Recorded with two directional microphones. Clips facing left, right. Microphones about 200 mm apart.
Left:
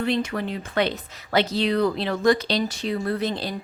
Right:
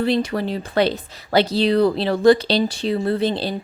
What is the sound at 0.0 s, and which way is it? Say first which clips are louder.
Speech: right 4 dB; 35° right (ahead or behind).